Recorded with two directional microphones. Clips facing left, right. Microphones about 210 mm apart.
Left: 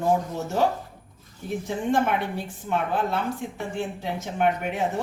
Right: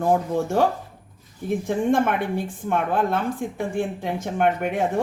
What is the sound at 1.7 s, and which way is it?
Speech, 55° right (ahead or behind).